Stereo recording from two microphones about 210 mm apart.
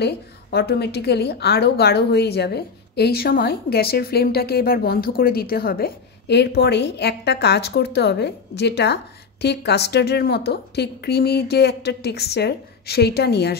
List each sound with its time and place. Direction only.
0.0 s a woman's voice: 50° left (ahead or behind)